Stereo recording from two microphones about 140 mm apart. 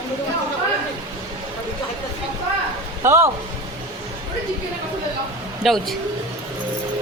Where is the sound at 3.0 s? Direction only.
20° right (ahead or behind).